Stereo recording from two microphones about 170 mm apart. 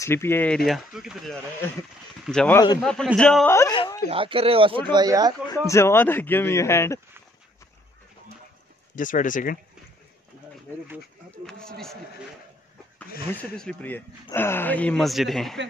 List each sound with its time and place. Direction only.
0.0 s speech: 15° left (ahead or behind)
0.7 s speech: centre (ahead or behind)
1.6 s speech: 15° left (ahead or behind)
3.4 s speech: 15° left (ahead or behind)
4.1 s speech: 35° right (ahead or behind)
5.5 s speech: 15° left (ahead or behind)
8.9 s speech: 50° left (ahead or behind)
11.4 s speech: 5° left (ahead or behind)
13.3 s speech: 5° left (ahead or behind)